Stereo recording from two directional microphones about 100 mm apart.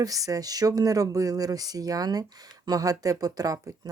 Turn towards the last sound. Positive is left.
turn(degrees=-35)  # may be behind; listen again after turning